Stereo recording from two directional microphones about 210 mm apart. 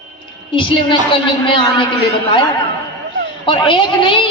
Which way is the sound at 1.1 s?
25° left (ahead or behind).